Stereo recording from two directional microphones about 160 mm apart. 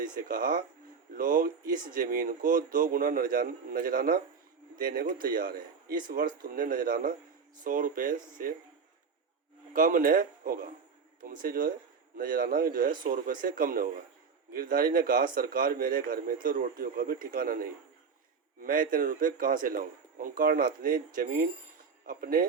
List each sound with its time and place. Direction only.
0.0 s speech: 60° right (ahead or behind)
9.7 s speech: 60° right (ahead or behind)